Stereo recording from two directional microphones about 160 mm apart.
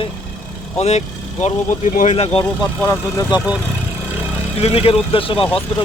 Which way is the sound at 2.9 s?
20° left (ahead or behind).